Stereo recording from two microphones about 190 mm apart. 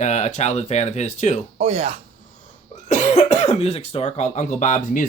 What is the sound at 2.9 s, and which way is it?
Speech, 40° left (ahead or behind).